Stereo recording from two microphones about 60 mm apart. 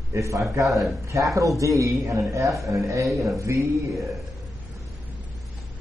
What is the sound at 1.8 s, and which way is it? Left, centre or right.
A man's voice, right.